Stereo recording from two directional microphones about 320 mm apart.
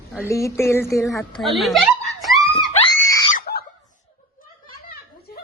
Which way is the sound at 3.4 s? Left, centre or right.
Left.